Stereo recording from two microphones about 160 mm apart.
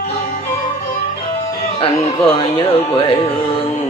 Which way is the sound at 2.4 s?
35° left (ahead or behind).